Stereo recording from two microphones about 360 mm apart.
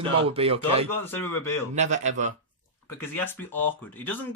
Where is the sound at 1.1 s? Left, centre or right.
Centre.